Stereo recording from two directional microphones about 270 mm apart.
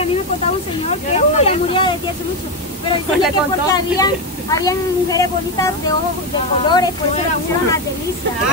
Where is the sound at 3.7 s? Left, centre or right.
Centre.